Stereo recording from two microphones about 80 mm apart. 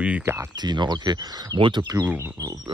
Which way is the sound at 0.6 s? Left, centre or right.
Right.